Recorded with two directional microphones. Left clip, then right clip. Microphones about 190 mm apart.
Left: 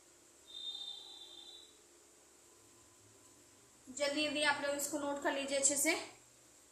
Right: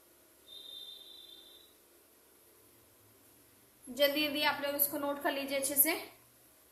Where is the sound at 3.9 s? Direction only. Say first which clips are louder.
Right 6 dB; 50° right (ahead or behind).